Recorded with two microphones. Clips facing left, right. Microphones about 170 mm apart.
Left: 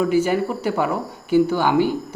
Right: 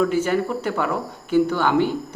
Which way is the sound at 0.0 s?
10° left (ahead or behind).